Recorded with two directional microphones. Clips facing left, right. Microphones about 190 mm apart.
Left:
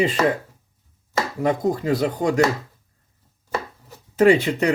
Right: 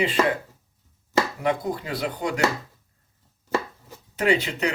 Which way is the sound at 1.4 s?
45° left (ahead or behind).